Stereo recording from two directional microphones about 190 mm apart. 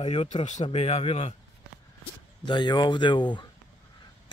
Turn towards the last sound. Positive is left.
turn(degrees=25)  # may be behind; listen again after turning